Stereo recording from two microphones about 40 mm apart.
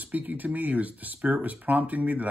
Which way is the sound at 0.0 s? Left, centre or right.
Right.